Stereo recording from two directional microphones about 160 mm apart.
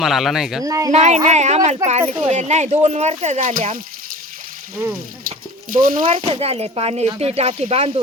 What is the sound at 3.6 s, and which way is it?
Water, 55° right (ahead or behind).